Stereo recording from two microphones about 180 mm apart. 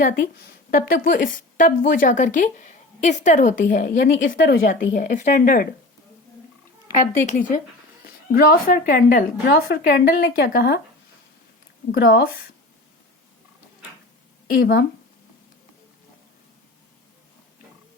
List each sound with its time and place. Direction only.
0.0 s speech: 50° left (ahead or behind)
7.3 s speech: 45° left (ahead or behind)
11.9 s speech: 55° left (ahead or behind)
14.5 s speech: 55° left (ahead or behind)